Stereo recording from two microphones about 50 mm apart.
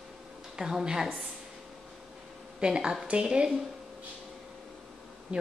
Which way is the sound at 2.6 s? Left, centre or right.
Centre.